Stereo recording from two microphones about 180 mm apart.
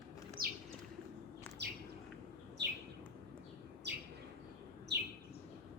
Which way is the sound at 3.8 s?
70° right (ahead or behind).